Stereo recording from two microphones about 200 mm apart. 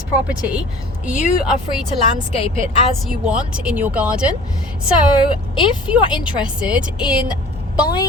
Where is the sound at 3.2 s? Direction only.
5° right (ahead or behind).